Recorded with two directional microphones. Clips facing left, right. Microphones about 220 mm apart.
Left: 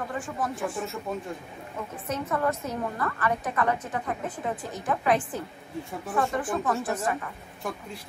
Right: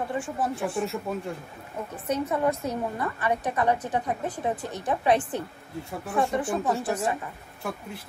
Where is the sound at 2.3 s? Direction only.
20° right (ahead or behind).